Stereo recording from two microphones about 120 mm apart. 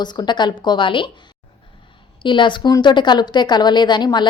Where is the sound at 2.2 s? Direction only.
40° left (ahead or behind).